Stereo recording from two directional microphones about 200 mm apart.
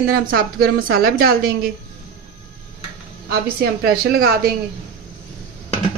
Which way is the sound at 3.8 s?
50° right (ahead or behind).